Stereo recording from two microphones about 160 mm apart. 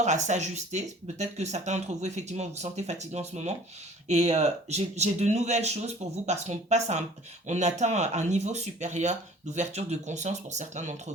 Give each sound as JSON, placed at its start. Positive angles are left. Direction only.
{"t": 0.0, "sound": "speech", "side_deg": -45}